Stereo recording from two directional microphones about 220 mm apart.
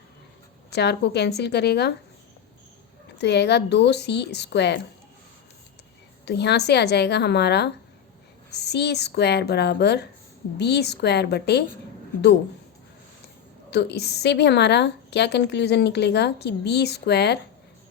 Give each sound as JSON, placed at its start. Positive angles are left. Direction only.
{"t": 0.7, "sound": "a woman's voice", "side_deg": 50}
{"t": 3.2, "sound": "a woman's voice", "side_deg": 50}
{"t": 6.2, "sound": "a woman's voice", "side_deg": 50}
{"t": 13.7, "sound": "a woman's voice", "side_deg": 50}